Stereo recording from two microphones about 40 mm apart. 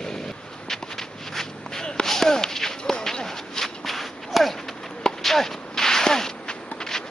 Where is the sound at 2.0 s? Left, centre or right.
Centre.